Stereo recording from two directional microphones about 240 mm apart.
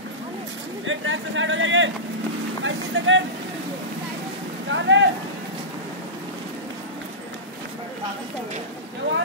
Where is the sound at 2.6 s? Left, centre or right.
Right.